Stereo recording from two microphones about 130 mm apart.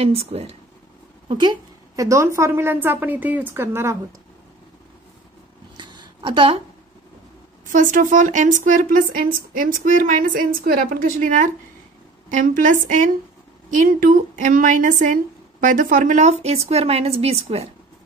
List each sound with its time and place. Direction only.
0.0 s a woman's voice: 50° right (ahead or behind)
1.4 s a woman's voice: 30° right (ahead or behind)
5.8 s a sound: 35° right (ahead or behind)
7.7 s a woman's voice: 85° right; by 17.6 s 50° right (ahead or behind)